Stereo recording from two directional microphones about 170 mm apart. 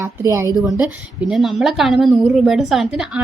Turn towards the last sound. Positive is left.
turn(degrees=-5)  # may be behind; listen again after turning